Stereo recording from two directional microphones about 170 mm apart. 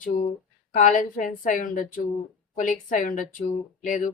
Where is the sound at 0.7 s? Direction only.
50° left (ahead or behind).